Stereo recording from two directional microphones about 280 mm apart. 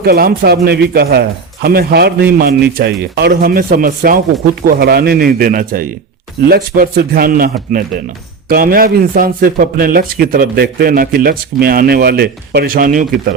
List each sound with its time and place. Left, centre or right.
0.0 s a man's voice: right